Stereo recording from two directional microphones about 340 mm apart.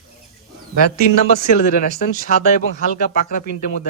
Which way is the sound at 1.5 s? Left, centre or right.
Left.